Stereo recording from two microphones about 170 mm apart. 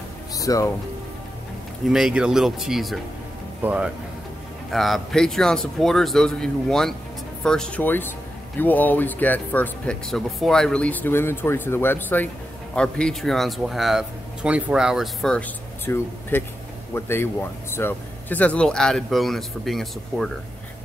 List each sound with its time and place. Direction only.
0.3 s music: 20° left (ahead or behind)
1.9 s speech: 5° right (ahead or behind)